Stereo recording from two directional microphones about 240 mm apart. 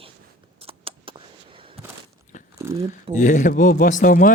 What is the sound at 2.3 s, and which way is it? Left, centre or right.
Biting, left.